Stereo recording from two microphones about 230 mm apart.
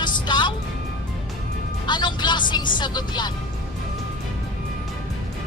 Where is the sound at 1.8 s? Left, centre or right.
Centre.